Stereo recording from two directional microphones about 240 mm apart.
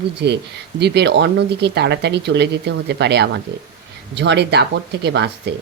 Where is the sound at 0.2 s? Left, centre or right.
Right.